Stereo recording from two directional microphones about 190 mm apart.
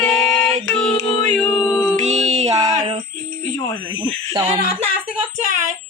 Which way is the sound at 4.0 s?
20° right (ahead or behind).